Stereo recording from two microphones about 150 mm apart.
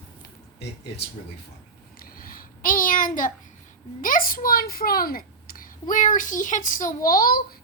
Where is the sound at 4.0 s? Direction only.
65° left (ahead or behind).